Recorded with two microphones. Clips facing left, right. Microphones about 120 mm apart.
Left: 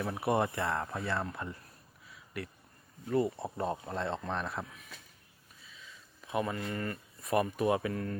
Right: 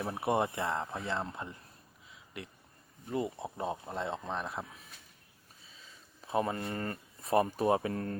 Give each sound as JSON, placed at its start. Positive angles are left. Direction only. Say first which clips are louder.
{"t": 0.0, "sound": "speech", "louder": "left 1 dB", "side_deg": -25}
{"t": 5.6, "sound": "speech", "louder": "left 3 dB", "side_deg": -35}